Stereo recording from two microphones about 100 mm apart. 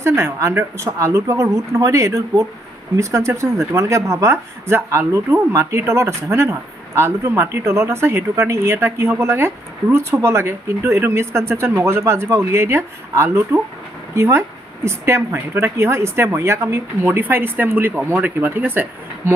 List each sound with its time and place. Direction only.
0.0 s speech: 25° right (ahead or behind)